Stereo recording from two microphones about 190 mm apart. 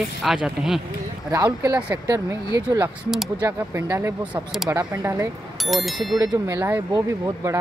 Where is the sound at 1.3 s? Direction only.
15° right (ahead or behind).